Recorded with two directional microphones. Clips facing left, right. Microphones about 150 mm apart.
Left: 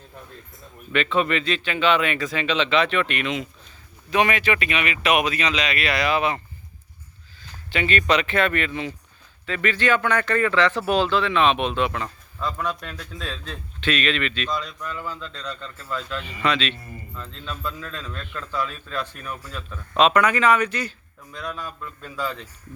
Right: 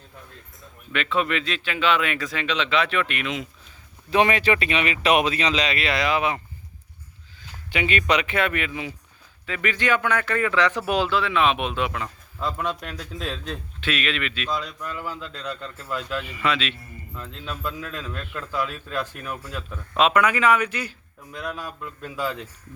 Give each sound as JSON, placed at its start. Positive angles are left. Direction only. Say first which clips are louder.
{"t": 0.9, "sound": "speech", "louder": "left 2 dB", "side_deg": 0}
{"t": 4.1, "sound": "speech", "louder": "right 1 dB", "side_deg": -30}
{"t": 7.7, "sound": "speech", "louder": "left 1 dB", "side_deg": -15}